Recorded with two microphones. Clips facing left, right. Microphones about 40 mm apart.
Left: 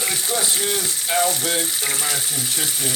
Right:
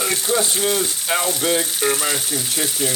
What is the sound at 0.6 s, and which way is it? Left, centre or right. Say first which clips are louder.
Speech: right 4 dB; right.